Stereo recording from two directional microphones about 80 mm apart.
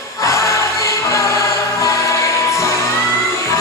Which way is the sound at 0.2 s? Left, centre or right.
Left.